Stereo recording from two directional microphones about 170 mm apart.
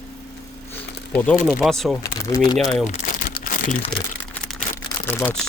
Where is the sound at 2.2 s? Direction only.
20° left (ahead or behind).